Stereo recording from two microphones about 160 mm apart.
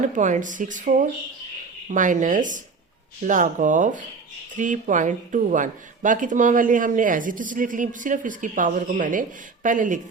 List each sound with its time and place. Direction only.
0.0 s speech: 50° right (ahead or behind)